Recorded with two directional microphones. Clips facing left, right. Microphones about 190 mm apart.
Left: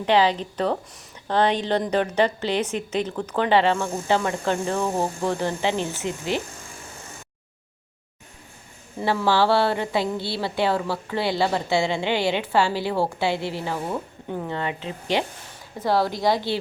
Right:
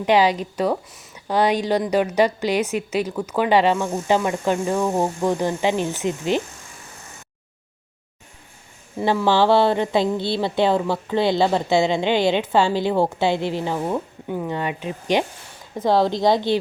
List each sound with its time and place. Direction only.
0.0 s a woman's voice: 15° right (ahead or behind)
9.0 s a woman's voice: 20° right (ahead or behind)